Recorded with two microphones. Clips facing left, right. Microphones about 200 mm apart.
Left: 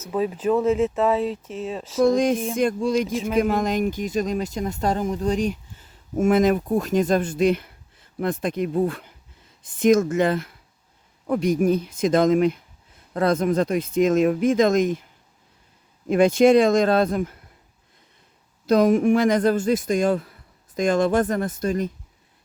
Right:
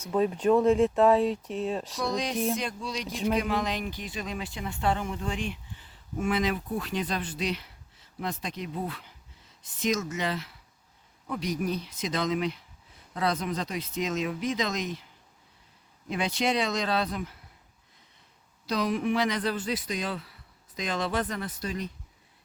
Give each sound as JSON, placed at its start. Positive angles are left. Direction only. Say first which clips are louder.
{"t": 0.0, "sound": "speech", "louder": "left 2 dB", "side_deg": 5}
{"t": 2.0, "sound": "speech", "louder": "left 8 dB", "side_deg": 50}
{"t": 3.1, "sound": "speech", "louder": "left 3 dB", "side_deg": 0}
{"t": 3.3, "sound": "speech", "louder": "left 11 dB", "side_deg": 45}
{"t": 16.0, "sound": "speech", "louder": "left 13 dB", "side_deg": 50}
{"t": 18.6, "sound": "speech", "louder": "left 11 dB", "side_deg": 50}